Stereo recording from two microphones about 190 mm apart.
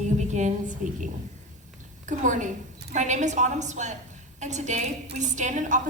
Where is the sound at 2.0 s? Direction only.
40° right (ahead or behind).